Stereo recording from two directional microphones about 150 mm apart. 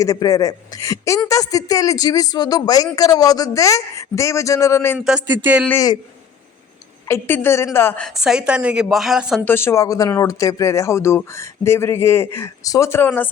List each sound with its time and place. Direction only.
0.0 s speech: 20° left (ahead or behind)
4.9 s speech: 5° right (ahead or behind)
5.6 s speech: 20° left (ahead or behind)
7.1 s speech: 15° left (ahead or behind)
8.2 s a woman's voice: 5° right (ahead or behind)
9.4 s speech: 15° left (ahead or behind)